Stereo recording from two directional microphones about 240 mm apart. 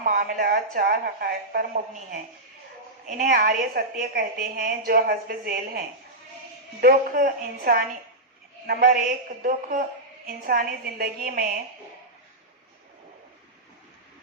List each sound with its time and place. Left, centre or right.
0.0 s speech: right
6.8 s speech: right